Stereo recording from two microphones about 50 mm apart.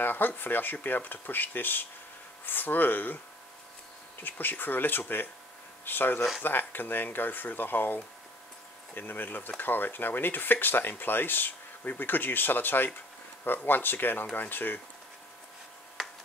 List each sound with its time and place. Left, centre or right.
0.0 s speech: left
4.2 s speech: left
16.0 s tick-tock: centre